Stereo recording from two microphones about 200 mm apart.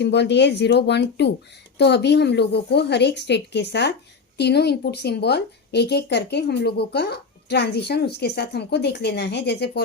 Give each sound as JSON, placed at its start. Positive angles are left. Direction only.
{"t": 0.0, "sound": "a woman's voice", "side_deg": 60}